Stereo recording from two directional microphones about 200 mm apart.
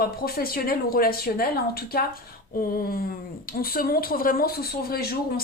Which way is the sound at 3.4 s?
50° left (ahead or behind).